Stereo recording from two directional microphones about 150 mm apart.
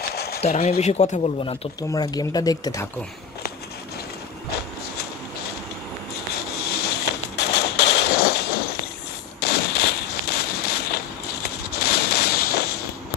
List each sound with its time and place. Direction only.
0.1 s a sound: 90° left
0.7 s speech: 45° left (ahead or behind)
1.4 s speech: 40° left (ahead or behind)
1.8 s speech: 25° left (ahead or behind)
6.7 s a sound: 90° left
11.7 s fireworks: 90° left